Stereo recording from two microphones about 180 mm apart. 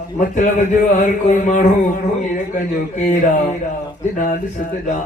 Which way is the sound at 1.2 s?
45° left (ahead or behind).